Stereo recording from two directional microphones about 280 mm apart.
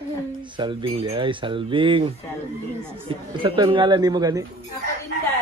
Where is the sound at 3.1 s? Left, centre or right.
Centre.